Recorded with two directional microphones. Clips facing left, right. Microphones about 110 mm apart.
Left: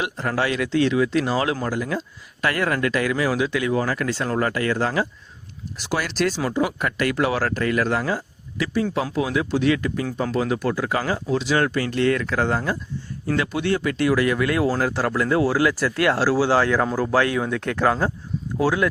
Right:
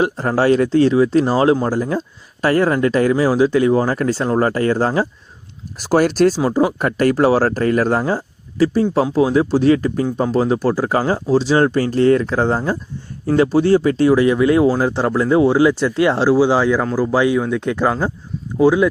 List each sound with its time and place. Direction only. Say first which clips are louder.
0.0 s speech: right 8 dB; 35° right (ahead or behind); by 18.9 s 10° right (ahead or behind)